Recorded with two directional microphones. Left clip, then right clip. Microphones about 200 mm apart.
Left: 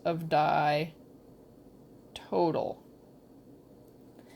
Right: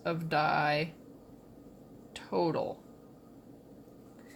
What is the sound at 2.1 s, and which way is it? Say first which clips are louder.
Speech: left 3 dB; 30° left (ahead or behind).